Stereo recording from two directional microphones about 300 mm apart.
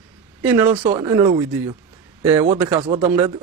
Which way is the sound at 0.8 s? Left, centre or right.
Right.